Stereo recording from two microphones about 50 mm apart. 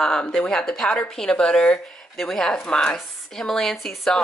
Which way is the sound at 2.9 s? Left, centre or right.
Centre.